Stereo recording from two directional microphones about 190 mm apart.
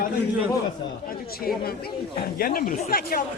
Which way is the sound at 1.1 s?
50° left (ahead or behind).